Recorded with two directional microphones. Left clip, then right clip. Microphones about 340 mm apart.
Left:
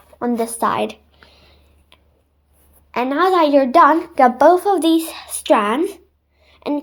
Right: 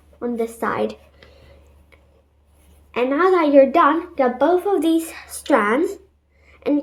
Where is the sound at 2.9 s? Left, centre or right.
Centre.